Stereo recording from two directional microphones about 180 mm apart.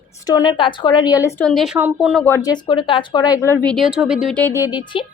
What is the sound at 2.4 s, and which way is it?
Speech, 25° left (ahead or behind).